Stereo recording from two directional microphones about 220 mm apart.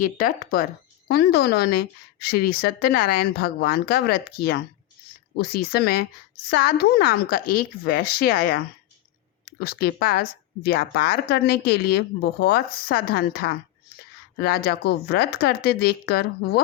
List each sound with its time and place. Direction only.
0.0 s speech: 40° left (ahead or behind)